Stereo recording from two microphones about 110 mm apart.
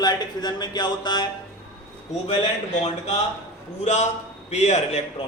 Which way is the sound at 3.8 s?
90° left.